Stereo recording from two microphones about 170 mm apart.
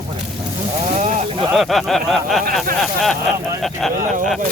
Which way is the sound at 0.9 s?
45° right (ahead or behind).